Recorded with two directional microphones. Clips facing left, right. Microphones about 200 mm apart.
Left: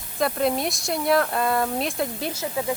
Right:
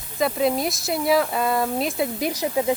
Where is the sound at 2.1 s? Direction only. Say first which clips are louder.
Right 5 dB; 15° right (ahead or behind).